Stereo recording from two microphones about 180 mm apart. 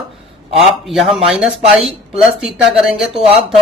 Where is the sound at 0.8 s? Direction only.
Centre (ahead or behind).